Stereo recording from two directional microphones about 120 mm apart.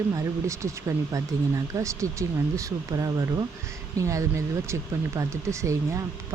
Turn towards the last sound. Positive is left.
turn(degrees=-25)  # may be behind; listen again after turning